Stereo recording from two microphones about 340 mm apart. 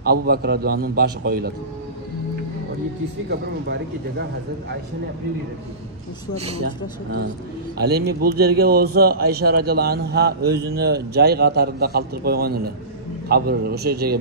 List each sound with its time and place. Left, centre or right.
0.0 s a man's voice: right
3.3 s a man's voice: right
6.3 s a man's voice: centre